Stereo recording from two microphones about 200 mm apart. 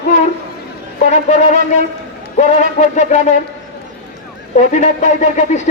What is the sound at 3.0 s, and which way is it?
Speech, 35° left (ahead or behind).